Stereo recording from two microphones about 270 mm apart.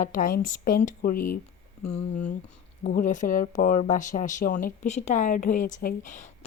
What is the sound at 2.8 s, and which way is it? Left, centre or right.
A woman's voice, left.